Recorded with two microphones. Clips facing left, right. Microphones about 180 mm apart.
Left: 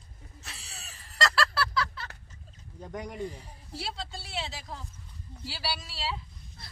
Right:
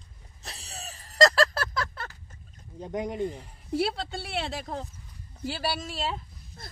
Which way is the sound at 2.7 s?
20° right (ahead or behind).